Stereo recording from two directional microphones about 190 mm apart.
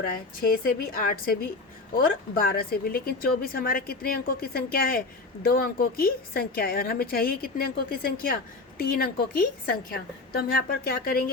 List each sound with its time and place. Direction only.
0.3 s a woman's voice: 50° left (ahead or behind)